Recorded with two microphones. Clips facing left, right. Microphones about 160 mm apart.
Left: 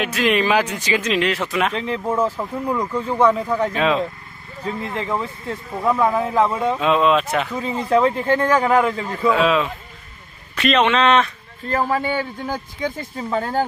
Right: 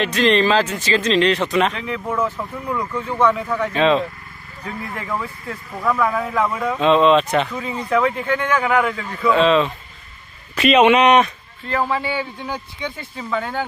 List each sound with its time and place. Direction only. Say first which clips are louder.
0.0 s a man's voice: right 2 dB; 5° left (ahead or behind)
1.7 s speech: left 3 dB; 30° left (ahead or behind)
2.7 s a man's voice: left 1 dB; 15° left (ahead or behind)
3.0 s speech: left 1 dB; 35° left (ahead or behind)
3.7 s speech: right 6 dB; centre (ahead or behind)
4.6 s speech: left 3 dB; 25° left (ahead or behind)
6.8 s speech: right 5 dB; 5° left (ahead or behind)
7.5 s speech: left 2 dB; 30° left (ahead or behind)
9.3 s speech: right 3 dB; 5° left (ahead or behind)
10.5 s a man's voice: right 4 dB; 5° right (ahead or behind)
11.6 s speech: left 1 dB; 45° left (ahead or behind)